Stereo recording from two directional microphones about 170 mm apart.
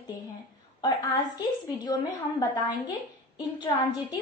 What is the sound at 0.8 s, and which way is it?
A woman's voice, 20° left (ahead or behind).